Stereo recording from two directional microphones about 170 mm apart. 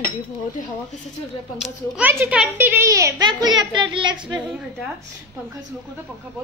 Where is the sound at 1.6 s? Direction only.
5° right (ahead or behind); by 4.2 s 30° right (ahead or behind).